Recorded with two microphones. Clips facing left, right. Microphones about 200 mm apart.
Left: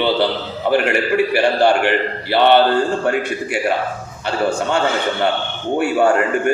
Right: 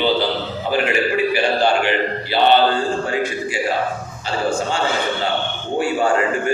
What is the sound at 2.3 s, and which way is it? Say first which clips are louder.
A man's voice: left 3 dB; 65° left (ahead or behind).